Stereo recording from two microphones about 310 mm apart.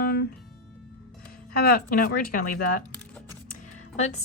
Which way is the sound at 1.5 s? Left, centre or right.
Left.